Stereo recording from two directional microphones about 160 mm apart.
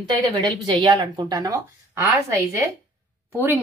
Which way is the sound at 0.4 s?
30° right (ahead or behind).